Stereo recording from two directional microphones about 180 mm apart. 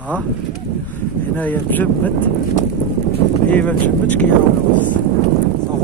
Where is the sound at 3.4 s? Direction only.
10° left (ahead or behind).